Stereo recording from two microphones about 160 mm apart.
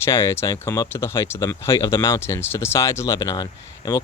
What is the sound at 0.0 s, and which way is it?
Speech, 15° left (ahead or behind).